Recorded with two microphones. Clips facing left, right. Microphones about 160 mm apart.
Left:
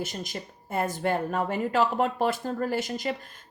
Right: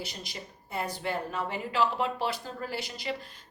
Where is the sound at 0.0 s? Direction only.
45° left (ahead or behind).